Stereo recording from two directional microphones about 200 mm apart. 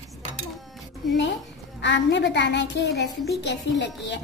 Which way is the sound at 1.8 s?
60° left (ahead or behind).